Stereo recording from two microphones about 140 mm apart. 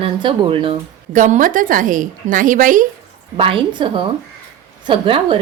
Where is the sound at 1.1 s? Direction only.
60° right (ahead or behind).